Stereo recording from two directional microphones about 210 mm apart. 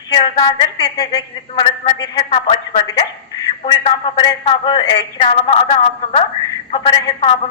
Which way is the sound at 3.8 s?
30° left (ahead or behind).